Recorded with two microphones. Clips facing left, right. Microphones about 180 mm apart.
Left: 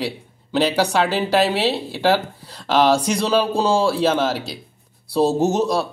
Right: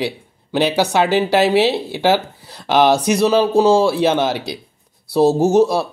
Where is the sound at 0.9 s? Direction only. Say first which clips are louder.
Right 3 dB; 15° right (ahead or behind).